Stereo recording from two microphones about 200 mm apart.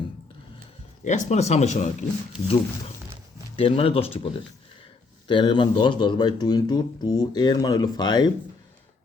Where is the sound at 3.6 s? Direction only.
30° left (ahead or behind).